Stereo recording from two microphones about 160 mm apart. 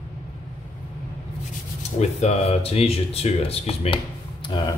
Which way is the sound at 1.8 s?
45° left (ahead or behind).